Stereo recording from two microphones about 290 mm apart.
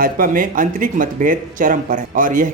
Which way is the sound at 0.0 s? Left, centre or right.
Right.